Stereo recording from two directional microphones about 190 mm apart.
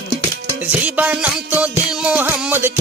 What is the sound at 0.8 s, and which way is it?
Music, 10° right (ahead or behind).